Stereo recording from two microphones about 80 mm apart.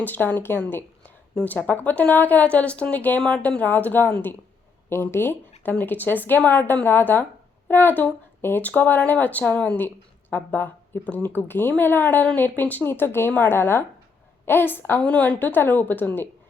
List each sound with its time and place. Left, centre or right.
0.0 s speech: left
0.7 s a sound: left
1.5 s speech: left
15.0 s speech: centre